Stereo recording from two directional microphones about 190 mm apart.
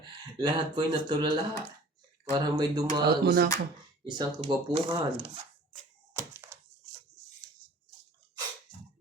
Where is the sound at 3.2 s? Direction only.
55° right (ahead or behind).